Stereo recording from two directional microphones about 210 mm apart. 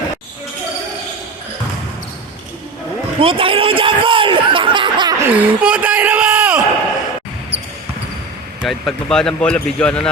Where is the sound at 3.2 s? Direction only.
25° right (ahead or behind).